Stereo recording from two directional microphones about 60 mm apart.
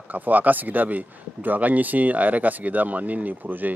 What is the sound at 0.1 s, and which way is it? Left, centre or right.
Speech, right.